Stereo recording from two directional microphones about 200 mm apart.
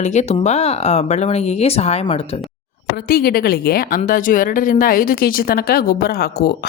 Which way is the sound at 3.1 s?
50° left (ahead or behind).